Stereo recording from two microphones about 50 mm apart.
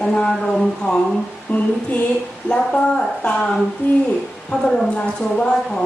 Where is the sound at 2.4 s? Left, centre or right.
Centre.